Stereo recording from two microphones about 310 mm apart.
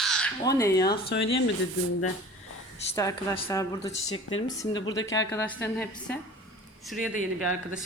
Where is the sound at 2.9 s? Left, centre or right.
Centre.